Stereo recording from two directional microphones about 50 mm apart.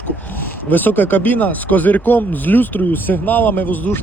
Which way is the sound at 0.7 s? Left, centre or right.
Left.